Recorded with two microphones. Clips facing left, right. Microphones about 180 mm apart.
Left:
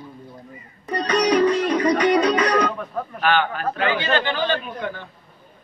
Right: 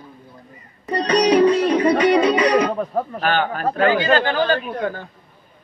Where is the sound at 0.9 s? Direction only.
35° right (ahead or behind).